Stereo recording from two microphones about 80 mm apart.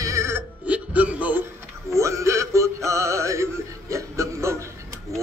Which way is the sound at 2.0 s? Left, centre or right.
Right.